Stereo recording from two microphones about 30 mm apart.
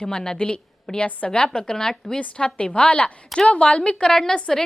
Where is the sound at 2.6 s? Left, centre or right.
Left.